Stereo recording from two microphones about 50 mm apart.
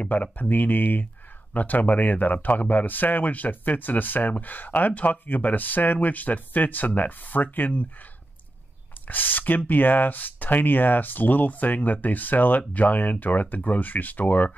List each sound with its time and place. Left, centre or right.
0.0 s speech: left
9.0 s speech: left